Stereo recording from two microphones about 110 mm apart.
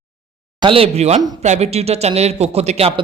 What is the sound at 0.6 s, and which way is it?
A man's voice, 60° right (ahead or behind).